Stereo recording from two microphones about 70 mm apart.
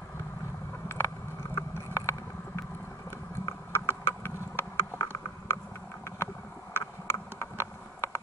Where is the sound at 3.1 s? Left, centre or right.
Left.